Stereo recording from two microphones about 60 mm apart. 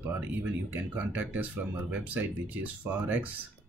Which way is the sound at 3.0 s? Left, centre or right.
Right.